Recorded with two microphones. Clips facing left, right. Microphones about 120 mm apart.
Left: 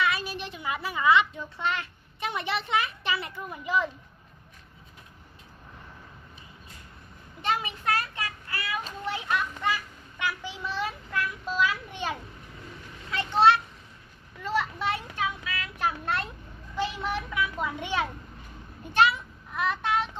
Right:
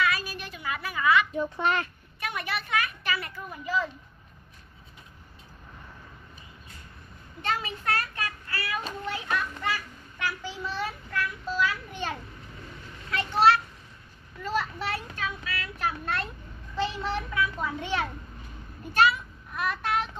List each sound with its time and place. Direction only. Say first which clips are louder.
0.0 s a sound: even; 25° left (ahead or behind)
2.1 s a child's voice: left 2 dB; 25° left (ahead or behind)
7.4 s a sound: left 1 dB; 15° left (ahead or behind)
13.1 s children playing: left 1 dB; 20° left (ahead or behind)
14.4 s child singing: left 1 dB; 20° left (ahead or behind)
16.8 s a child's voice: right 1 dB; 15° left (ahead or behind)
18.9 s child singing: even; 20° left (ahead or behind)